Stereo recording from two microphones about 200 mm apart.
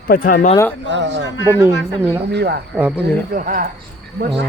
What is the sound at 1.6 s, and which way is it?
Speech, 15° right (ahead or behind).